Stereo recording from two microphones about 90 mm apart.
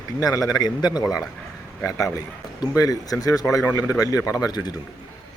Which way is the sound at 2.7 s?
40° left (ahead or behind).